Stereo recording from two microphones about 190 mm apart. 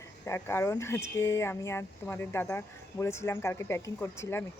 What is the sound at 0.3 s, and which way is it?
Speech, 15° left (ahead or behind).